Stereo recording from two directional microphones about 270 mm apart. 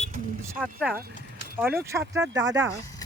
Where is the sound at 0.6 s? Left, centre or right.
Centre.